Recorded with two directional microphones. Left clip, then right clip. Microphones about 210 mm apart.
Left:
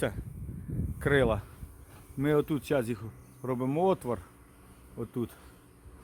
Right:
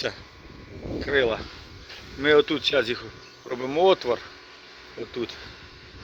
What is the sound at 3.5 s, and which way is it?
Insect, 15° left (ahead or behind).